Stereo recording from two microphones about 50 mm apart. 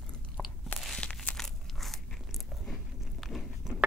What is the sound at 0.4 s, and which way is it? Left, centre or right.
Crunch, centre.